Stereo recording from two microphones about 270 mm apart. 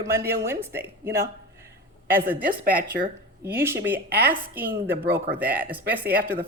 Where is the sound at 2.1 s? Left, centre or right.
Centre.